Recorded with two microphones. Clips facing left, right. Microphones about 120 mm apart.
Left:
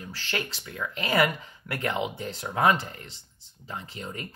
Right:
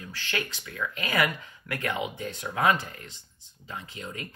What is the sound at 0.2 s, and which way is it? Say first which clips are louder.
Speech: even; 35° left (ahead or behind).